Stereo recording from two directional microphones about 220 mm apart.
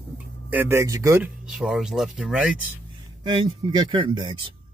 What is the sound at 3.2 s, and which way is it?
Speech, 20° right (ahead or behind).